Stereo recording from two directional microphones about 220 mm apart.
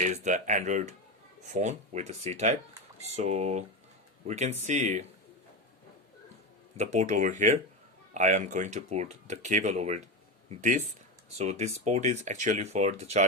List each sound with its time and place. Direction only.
0.0 s speech: 35° right (ahead or behind)
6.7 s speech: 30° right (ahead or behind)